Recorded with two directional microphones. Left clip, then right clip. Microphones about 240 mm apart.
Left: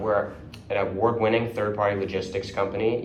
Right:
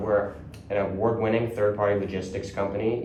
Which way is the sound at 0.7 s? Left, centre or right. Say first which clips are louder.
Left 1 dB; centre.